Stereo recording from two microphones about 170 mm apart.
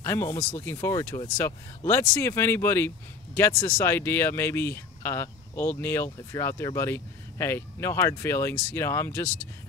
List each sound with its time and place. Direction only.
0.0 s speech: 15° left (ahead or behind)